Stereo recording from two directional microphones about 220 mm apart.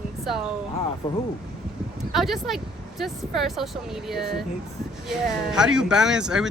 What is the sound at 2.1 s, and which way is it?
Speech, centre (ahead or behind).